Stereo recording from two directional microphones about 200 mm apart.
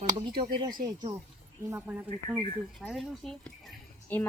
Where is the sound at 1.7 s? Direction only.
10° right (ahead or behind); by 4.2 s 10° left (ahead or behind).